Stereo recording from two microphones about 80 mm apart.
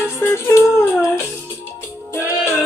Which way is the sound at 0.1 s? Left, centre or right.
Left.